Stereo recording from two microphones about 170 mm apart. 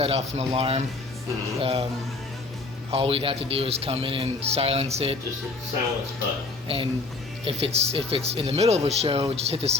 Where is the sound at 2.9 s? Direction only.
35° right (ahead or behind).